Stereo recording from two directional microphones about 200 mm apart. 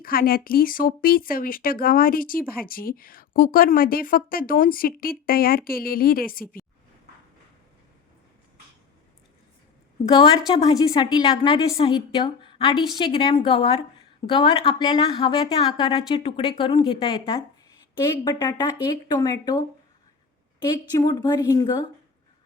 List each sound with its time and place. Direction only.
0.0 s speech: 45° left (ahead or behind)
10.1 s a woman's voice: 25° left (ahead or behind)
20.9 s a woman's voice: 20° left (ahead or behind)